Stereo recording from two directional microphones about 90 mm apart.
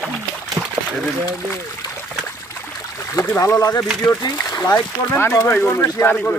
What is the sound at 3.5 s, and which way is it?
Speech, 45° left (ahead or behind).